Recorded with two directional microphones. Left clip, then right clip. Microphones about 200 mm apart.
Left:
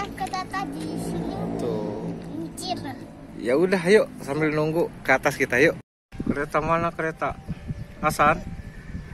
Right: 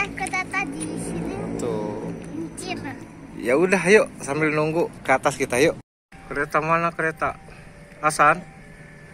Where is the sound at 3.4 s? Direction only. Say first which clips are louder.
Right 2 dB; centre (ahead or behind).